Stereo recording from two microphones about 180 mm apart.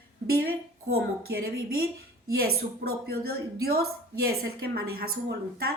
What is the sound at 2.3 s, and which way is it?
A woman's voice, 60° right (ahead or behind).